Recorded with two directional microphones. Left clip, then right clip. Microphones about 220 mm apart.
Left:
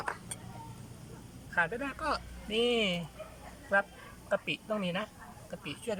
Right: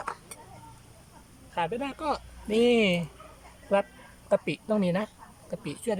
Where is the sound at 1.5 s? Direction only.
15° right (ahead or behind).